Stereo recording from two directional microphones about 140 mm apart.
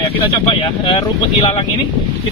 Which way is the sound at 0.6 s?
35° left (ahead or behind).